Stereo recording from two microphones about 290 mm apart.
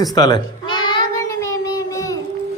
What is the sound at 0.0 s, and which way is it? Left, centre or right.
Child singing, centre.